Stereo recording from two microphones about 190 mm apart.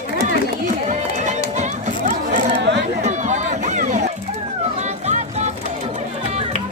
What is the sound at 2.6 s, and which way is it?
Chatter, 65° right (ahead or behind).